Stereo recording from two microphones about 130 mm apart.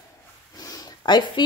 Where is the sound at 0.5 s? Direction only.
30° left (ahead or behind).